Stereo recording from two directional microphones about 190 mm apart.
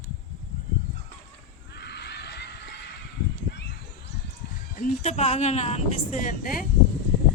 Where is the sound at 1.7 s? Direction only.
60° left (ahead or behind).